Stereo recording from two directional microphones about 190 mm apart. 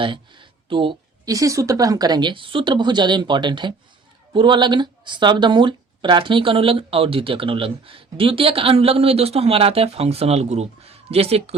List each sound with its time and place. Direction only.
0.0 s speech: 25° right (ahead or behind)